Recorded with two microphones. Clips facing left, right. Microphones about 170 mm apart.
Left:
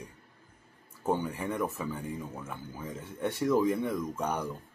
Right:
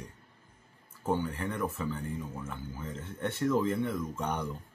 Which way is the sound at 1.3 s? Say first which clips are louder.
Left 1 dB; 10° left (ahead or behind).